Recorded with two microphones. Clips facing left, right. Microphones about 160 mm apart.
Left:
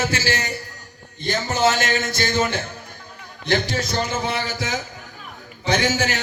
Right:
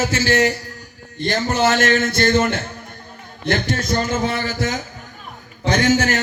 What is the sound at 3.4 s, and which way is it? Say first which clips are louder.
A man's voice: right 1 dB; 50° right (ahead or behind).